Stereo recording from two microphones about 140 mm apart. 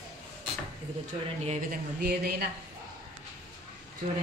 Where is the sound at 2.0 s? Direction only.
90° right.